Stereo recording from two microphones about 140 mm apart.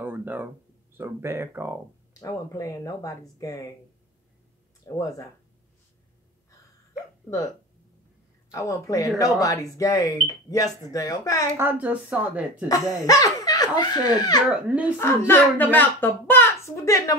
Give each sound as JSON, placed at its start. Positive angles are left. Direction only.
{"t": 0.0, "sound": "a sound", "side_deg": -15}
{"t": 0.9, "sound": "a woman's voice", "side_deg": -20}
{"t": 2.1, "sound": "speech", "side_deg": 25}
{"t": 4.8, "sound": "speech", "side_deg": 25}
{"t": 8.5, "sound": "speech", "side_deg": 20}
{"t": 11.5, "sound": "a woman's voice", "side_deg": -15}
{"t": 13.0, "sound": "speech", "side_deg": 25}
{"t": 14.5, "sound": "a woman's voice", "side_deg": -10}
{"t": 15.0, "sound": "a child's voice", "side_deg": 15}